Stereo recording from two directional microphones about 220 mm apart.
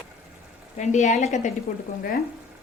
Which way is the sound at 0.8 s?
30° left (ahead or behind).